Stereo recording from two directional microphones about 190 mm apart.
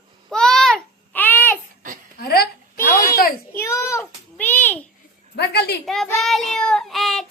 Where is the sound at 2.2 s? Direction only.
50° left (ahead or behind).